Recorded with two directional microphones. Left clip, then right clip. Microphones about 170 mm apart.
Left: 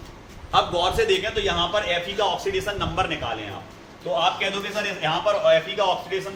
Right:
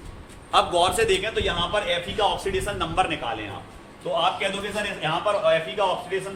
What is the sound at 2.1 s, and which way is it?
Speech, 40° right (ahead or behind).